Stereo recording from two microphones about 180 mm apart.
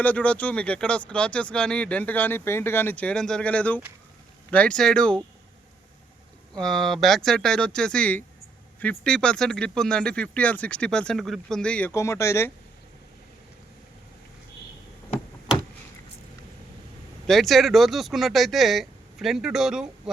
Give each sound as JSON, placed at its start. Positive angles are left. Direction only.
{"t": 0.0, "sound": "speech", "side_deg": 10}
{"t": 6.6, "sound": "speech", "side_deg": 5}
{"t": 17.2, "sound": "speech", "side_deg": 0}